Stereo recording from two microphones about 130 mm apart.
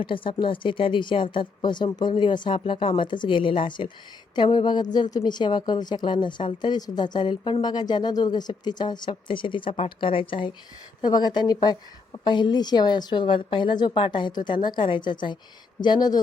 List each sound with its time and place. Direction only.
0.0 s a woman's voice: 40° left (ahead or behind)